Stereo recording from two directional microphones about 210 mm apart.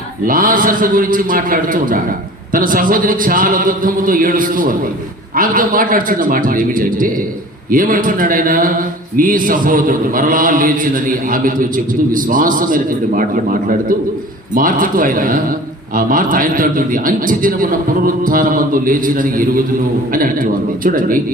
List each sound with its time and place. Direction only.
0.3 s a man's voice: 40° right (ahead or behind)